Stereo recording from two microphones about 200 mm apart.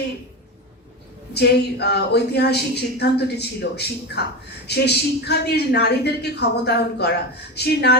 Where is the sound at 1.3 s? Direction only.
55° left (ahead or behind).